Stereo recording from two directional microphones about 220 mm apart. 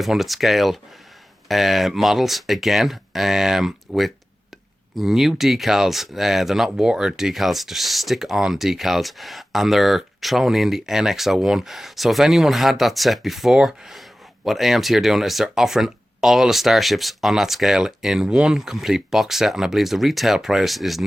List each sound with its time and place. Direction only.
0.0 s speech: centre (ahead or behind)